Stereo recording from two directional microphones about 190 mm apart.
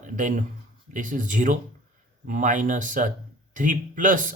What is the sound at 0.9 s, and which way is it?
Speech, 45° right (ahead or behind).